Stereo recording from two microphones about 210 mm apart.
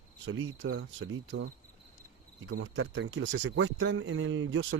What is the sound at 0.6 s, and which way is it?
Speech, 55° right (ahead or behind).